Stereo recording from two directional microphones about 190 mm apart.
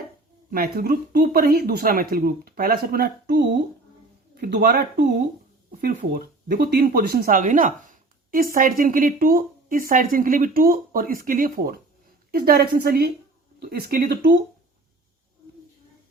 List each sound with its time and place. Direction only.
0.5 s a woman's voice: 50° right (ahead or behind)